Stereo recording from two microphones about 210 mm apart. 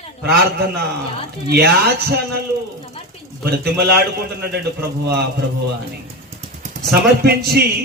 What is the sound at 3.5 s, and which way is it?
A man's voice, 50° right (ahead or behind).